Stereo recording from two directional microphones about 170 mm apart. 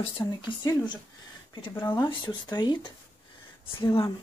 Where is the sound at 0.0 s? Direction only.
25° left (ahead or behind).